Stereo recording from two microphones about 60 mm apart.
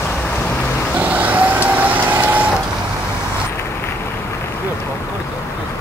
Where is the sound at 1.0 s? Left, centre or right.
Right.